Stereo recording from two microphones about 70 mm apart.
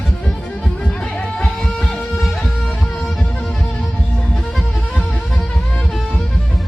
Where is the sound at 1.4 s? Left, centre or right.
Centre.